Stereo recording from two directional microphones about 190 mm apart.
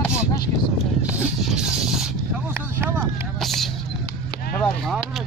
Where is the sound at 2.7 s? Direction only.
10° right (ahead or behind).